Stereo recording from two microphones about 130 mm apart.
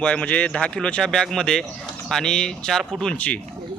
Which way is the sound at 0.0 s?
10° left (ahead or behind).